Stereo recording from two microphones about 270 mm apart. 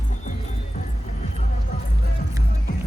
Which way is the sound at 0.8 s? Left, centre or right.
Left.